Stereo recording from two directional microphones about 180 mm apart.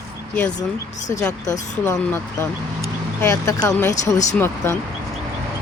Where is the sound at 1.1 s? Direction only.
20° left (ahead or behind).